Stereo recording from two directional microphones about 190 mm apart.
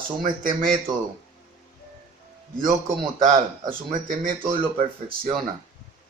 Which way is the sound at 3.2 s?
45° right (ahead or behind).